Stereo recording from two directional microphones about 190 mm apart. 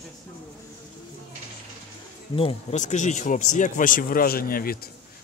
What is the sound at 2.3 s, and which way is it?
Speech, 35° left (ahead or behind).